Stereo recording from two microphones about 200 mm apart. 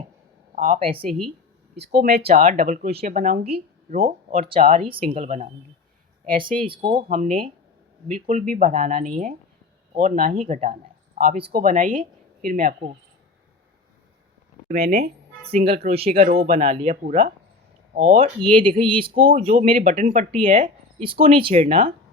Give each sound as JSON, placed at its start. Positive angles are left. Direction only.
{"t": 0.5, "sound": "speech", "side_deg": -40}
{"t": 0.8, "sound": "speech", "side_deg": -25}
{"t": 1.7, "sound": "speech", "side_deg": -55}
{"t": 3.9, "sound": "speech", "side_deg": -50}
{"t": 4.4, "sound": "speech", "side_deg": -30}
{"t": 6.7, "sound": "speech", "side_deg": -25}
{"t": 7.1, "sound": "speech", "side_deg": -40}
{"t": 14.7, "sound": "speech", "side_deg": -45}
{"t": 15.6, "sound": "speech", "side_deg": -30}
{"t": 16.1, "sound": "speech", "side_deg": -45}
{"t": 19.6, "sound": "speech", "side_deg": -40}